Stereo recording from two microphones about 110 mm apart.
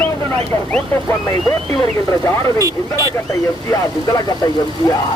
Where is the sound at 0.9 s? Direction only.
30° left (ahead or behind).